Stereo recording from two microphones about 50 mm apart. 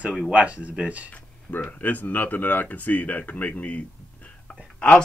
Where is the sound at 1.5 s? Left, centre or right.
Left.